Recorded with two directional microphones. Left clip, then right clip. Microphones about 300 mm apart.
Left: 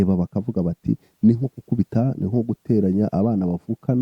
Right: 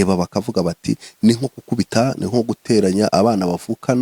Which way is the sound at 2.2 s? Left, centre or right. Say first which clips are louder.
Right 5 dB; centre.